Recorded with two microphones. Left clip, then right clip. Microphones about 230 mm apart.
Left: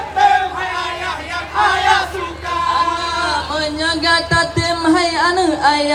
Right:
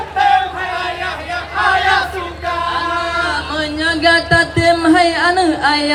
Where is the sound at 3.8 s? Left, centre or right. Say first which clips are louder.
Right 4 dB; right.